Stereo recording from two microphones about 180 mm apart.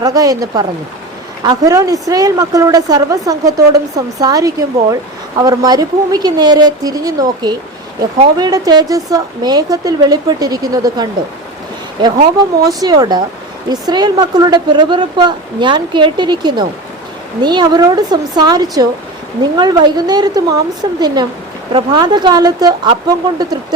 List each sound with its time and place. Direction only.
0.0 s speech: 20° right (ahead or behind)
12.6 s speech: 20° right (ahead or behind)